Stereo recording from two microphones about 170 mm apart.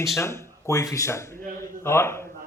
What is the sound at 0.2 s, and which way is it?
Speech, 15° left (ahead or behind).